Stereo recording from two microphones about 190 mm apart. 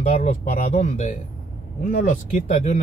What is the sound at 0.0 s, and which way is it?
Speech, 40° left (ahead or behind).